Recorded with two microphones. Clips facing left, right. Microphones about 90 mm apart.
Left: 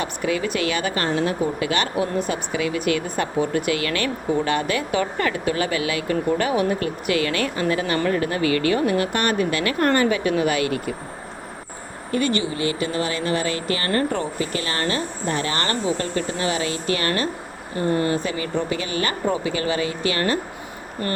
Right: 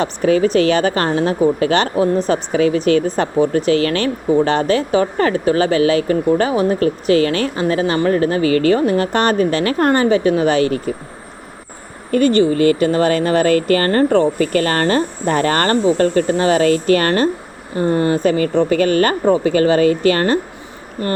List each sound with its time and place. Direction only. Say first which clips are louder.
0.0 s speech: right 9 dB; 35° right (ahead or behind)
12.2 s speech: right 11 dB; 40° right (ahead or behind)
17.7 s speech: right 5 dB; 30° right (ahead or behind)
21.0 s speech: right 6 dB; 25° right (ahead or behind)